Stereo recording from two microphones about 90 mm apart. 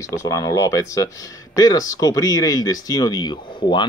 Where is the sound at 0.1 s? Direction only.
40° left (ahead or behind).